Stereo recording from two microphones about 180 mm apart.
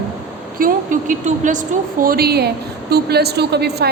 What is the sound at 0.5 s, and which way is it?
A woman's voice, 50° right (ahead or behind).